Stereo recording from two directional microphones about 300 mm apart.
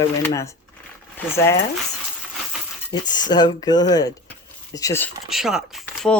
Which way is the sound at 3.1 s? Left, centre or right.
Centre.